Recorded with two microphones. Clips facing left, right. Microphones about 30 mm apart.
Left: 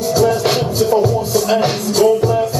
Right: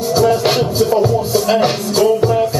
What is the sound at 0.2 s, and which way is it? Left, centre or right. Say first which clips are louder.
Music: right 2 dB; centre.